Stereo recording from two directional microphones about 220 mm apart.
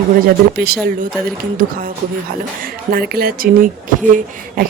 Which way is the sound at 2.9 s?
45° right (ahead or behind).